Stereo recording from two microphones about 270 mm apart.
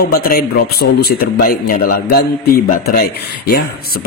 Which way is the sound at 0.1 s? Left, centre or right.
Left.